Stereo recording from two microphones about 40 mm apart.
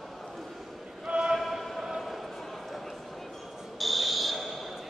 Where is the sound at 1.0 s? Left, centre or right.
Right.